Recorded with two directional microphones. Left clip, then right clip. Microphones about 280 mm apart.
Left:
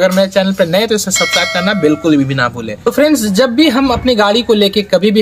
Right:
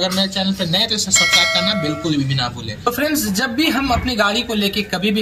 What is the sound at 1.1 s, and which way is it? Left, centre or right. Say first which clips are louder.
Speech: right 1 dB; centre.